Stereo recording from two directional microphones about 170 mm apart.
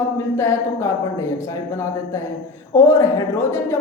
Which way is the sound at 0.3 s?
15° left (ahead or behind).